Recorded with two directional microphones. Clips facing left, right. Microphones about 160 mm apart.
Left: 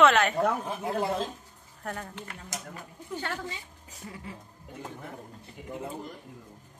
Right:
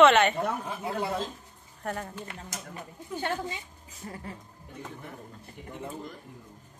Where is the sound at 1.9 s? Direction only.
10° right (ahead or behind).